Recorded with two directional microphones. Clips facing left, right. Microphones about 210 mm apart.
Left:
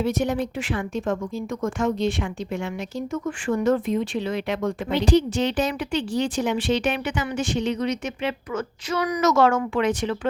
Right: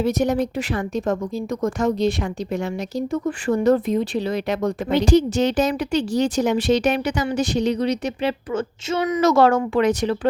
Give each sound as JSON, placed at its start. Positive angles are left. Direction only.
{"t": 0.0, "sound": "speech", "side_deg": -40}